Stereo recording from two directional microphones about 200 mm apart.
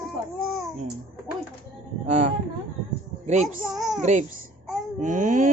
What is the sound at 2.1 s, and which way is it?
Speech, 35° right (ahead or behind).